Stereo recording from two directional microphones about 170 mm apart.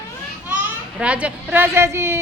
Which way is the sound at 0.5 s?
5° right (ahead or behind).